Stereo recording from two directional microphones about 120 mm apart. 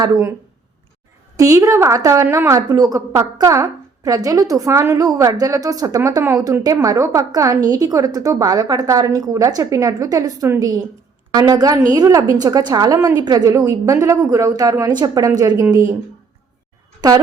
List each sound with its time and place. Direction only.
1.4 s a woman's voice: 25° right (ahead or behind)